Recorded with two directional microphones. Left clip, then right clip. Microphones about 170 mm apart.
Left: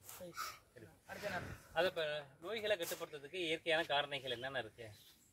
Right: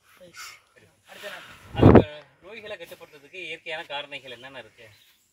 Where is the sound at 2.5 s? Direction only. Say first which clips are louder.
Even; 15° left (ahead or behind).